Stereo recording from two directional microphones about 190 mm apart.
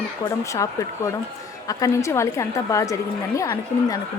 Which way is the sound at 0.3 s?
15° left (ahead or behind).